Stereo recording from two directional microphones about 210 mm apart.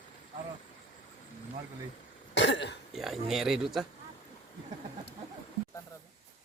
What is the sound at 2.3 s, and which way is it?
Cough, 55° left (ahead or behind).